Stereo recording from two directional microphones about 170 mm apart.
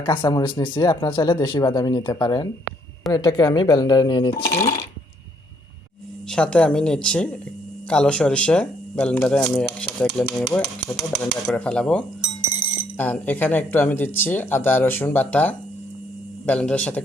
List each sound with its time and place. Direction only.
0.0 s speech: 25° left (ahead or behind)
6.3 s speech: 5° left (ahead or behind)